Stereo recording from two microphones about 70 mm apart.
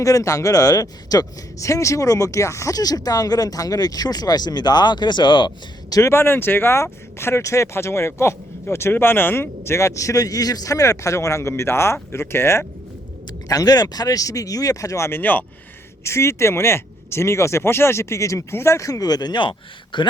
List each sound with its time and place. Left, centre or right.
0.0 s speech: left
2.7 s speech: left
6.0 s speech: left
13.5 s speech: left
15.2 s speech: left
16.0 s speech: left